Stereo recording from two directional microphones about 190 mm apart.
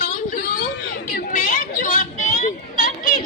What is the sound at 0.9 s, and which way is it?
Chatter, 45° left (ahead or behind).